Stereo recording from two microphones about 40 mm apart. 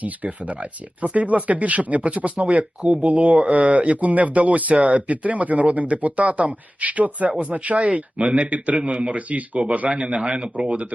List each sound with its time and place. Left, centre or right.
0.0 s speech: right
8.8 s speech: right
9.7 s speech: right